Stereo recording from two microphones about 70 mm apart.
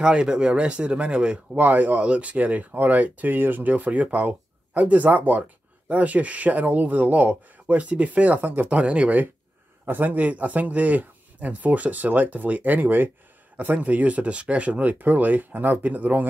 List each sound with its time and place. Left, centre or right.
0.0 s speech: centre